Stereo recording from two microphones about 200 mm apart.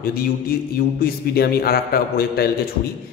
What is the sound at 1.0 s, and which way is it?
A man's voice, 50° left (ahead or behind).